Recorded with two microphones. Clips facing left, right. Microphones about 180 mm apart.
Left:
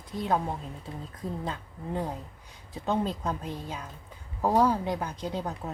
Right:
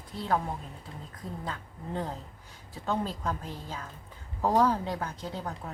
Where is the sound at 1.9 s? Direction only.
10° left (ahead or behind).